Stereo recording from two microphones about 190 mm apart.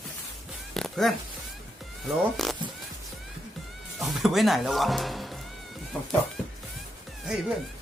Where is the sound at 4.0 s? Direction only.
Centre (ahead or behind).